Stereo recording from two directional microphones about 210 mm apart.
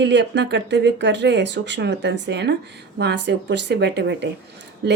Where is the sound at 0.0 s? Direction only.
55° right (ahead or behind).